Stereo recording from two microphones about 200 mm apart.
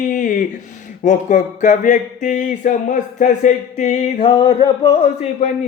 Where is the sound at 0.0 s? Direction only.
40° left (ahead or behind).